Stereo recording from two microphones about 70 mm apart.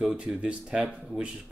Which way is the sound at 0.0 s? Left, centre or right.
Centre.